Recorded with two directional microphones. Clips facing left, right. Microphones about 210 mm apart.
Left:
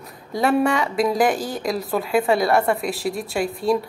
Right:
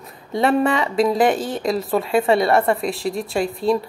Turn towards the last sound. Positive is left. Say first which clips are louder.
# right 1 dB
turn(degrees=0)  # may be behind; listen again after turning